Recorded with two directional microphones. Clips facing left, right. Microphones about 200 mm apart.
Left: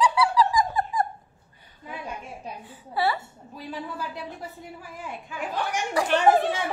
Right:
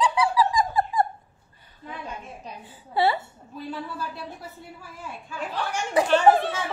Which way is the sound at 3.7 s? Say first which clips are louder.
Even; 15° left (ahead or behind).